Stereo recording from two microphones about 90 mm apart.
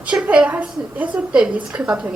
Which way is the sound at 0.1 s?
15° right (ahead or behind).